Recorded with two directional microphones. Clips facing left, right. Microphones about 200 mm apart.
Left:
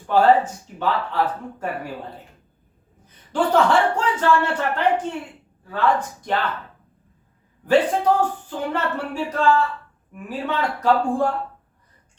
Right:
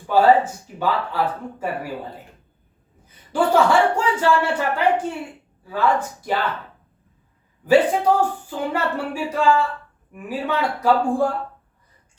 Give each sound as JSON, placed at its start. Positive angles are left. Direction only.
{"t": 0.1, "sound": "speech", "side_deg": -10}
{"t": 3.3, "sound": "speech", "side_deg": -10}
{"t": 7.7, "sound": "speech", "side_deg": -10}